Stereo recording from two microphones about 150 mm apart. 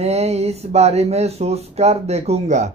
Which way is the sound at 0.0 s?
45° right (ahead or behind).